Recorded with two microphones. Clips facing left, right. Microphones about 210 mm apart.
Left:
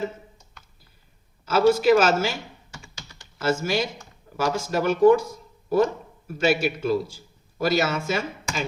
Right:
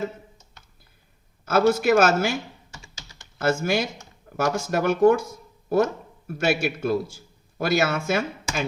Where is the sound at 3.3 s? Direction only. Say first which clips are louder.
Right 1 dB; 55° right (ahead or behind).